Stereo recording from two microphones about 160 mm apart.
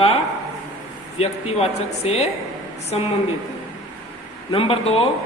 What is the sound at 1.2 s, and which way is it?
A man's voice, 40° left (ahead or behind).